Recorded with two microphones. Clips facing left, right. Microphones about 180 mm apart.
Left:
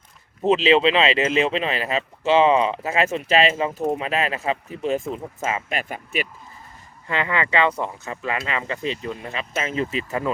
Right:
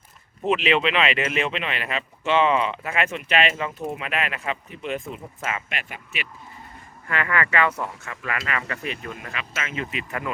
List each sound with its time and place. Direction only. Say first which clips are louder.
0.4 s speech: left 5 dB; 30° left (ahead or behind)
7.1 s speech: left 2 dB; 25° left (ahead or behind)